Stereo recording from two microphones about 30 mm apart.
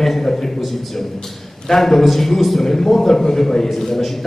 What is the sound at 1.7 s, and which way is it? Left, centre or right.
A man's voice, centre.